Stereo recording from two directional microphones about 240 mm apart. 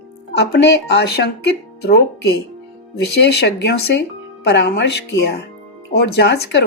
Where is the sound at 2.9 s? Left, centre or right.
Left.